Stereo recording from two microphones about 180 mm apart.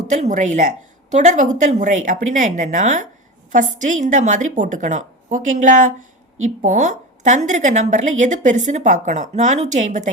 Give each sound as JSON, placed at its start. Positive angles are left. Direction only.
{"t": 0.1, "sound": "a woman's voice", "side_deg": -45}